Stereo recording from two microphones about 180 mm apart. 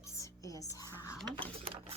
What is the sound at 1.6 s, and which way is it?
Sewing machine, 30° right (ahead or behind).